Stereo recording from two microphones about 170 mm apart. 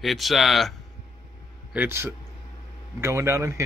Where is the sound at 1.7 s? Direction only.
10° right (ahead or behind).